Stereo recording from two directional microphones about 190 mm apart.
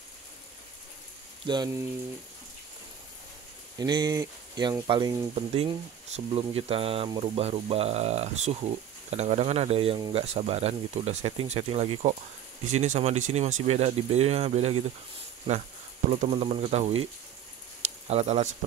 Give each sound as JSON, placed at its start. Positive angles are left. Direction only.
{"t": 1.4, "sound": "speech", "side_deg": -25}
{"t": 3.7, "sound": "speech", "side_deg": -20}
{"t": 16.1, "sound": "speech", "side_deg": -35}
{"t": 18.0, "sound": "speech", "side_deg": -35}